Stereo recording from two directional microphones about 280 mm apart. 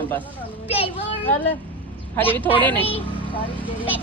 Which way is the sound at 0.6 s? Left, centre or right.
Left.